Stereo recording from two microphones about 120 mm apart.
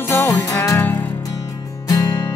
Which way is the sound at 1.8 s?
30° left (ahead or behind).